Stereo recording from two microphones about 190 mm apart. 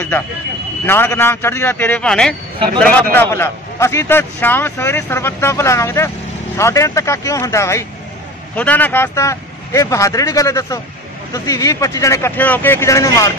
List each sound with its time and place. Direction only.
0.8 s a man's voice: 10° left (ahead or behind)